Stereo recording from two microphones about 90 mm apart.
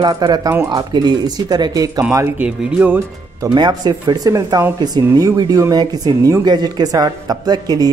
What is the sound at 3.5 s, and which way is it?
Speech, 50° right (ahead or behind).